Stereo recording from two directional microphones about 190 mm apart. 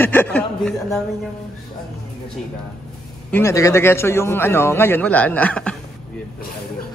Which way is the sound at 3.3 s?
15° left (ahead or behind).